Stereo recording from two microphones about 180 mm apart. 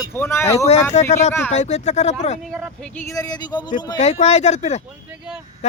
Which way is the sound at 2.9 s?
20° left (ahead or behind).